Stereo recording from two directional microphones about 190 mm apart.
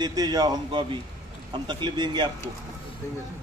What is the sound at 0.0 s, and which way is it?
A man's voice, 20° right (ahead or behind).